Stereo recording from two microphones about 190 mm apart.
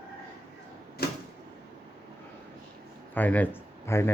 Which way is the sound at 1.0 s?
55° left (ahead or behind).